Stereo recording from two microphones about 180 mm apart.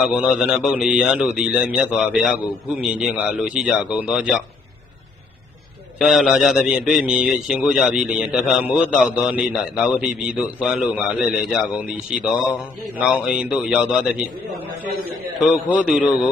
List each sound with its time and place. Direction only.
0.0 s a man's voice: 5° right (ahead or behind)
6.0 s a man's voice: centre (ahead or behind)
15.4 s a man's voice: centre (ahead or behind)